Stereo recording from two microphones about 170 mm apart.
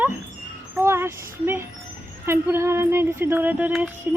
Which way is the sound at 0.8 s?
15° right (ahead or behind).